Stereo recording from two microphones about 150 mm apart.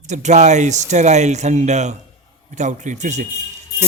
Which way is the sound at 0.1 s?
50° right (ahead or behind).